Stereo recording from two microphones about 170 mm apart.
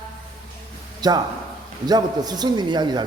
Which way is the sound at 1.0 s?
25° right (ahead or behind).